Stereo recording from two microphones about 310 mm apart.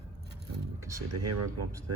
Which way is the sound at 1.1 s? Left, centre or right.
Right.